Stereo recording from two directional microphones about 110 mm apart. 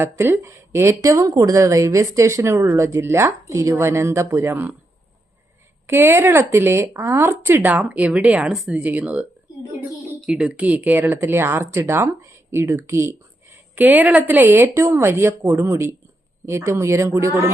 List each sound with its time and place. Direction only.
0.0 s speech: 20° right (ahead or behind)
5.8 s speech: 20° right (ahead or behind)
10.2 s speech: centre (ahead or behind)
10.8 s speech: 15° right (ahead or behind)